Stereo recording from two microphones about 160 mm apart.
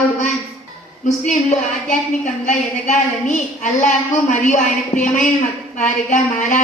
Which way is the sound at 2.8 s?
50° left (ahead or behind).